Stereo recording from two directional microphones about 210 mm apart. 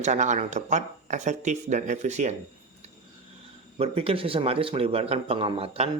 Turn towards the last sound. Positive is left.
turn(degrees=-30)  # may be behind; listen again after turning